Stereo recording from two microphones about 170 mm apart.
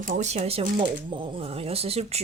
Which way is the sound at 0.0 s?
45° right (ahead or behind).